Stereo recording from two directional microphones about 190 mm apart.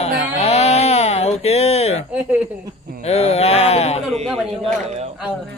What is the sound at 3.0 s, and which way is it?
Speech, 35° left (ahead or behind).